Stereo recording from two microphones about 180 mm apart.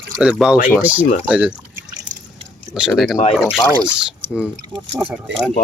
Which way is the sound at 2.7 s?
Centre (ahead or behind).